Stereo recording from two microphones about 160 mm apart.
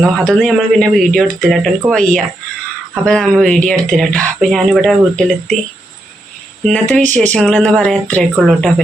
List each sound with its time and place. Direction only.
0.0 s speech: centre (ahead or behind)
6.7 s speech: 5° left (ahead or behind)
7.0 s speech: 50° right (ahead or behind)
7.3 s speech: 5° left (ahead or behind)